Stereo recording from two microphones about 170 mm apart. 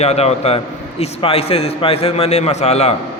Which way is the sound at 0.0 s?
40° left (ahead or behind).